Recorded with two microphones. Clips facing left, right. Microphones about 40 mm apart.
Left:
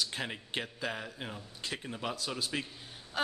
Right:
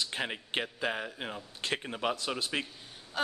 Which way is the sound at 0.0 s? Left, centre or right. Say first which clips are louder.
Right 2 dB; right.